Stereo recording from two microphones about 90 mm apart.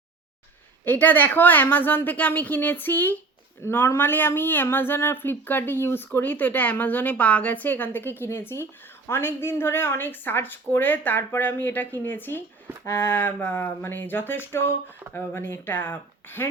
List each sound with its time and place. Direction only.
0.9 s speech: 20° left (ahead or behind)